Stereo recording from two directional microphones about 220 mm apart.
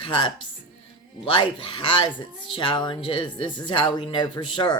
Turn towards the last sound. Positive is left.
turn(degrees=20)  # may be behind; listen again after turning